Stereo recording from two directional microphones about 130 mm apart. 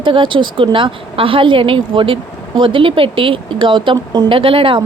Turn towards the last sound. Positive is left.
turn(degrees=-40)  # may be behind; listen again after turning